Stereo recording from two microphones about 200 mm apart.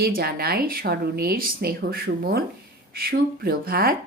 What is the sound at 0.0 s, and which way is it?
Speech, 50° right (ahead or behind).